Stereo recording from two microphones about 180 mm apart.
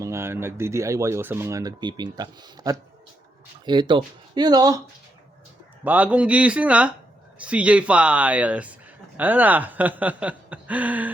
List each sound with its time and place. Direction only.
0.0 s speech: 15° right (ahead or behind)
5.8 s speech: 10° right (ahead or behind)